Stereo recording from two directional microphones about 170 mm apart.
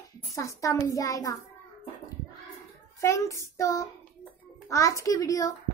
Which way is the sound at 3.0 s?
15° left (ahead or behind).